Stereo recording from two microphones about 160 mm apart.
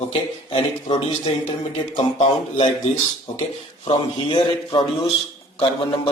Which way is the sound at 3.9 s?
30° left (ahead or behind).